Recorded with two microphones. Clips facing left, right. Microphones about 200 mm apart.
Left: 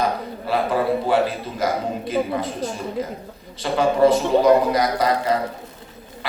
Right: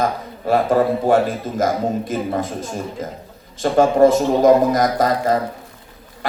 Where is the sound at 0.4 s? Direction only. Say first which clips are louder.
Right 5 dB; 45° right (ahead or behind).